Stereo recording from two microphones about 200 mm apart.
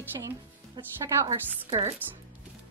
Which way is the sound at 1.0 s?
20° right (ahead or behind).